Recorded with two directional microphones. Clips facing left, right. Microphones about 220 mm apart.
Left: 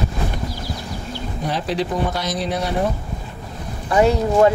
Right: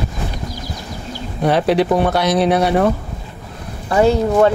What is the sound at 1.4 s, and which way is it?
Speech, 65° right (ahead or behind).